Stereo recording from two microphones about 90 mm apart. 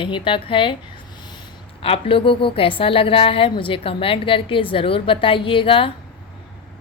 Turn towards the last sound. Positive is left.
turn(degrees=80)